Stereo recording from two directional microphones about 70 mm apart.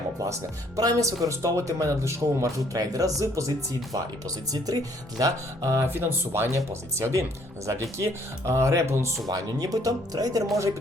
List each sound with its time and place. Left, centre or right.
0.8 s speech: right
4.5 s speech: right
5.9 s speech: right
9.2 s speech: right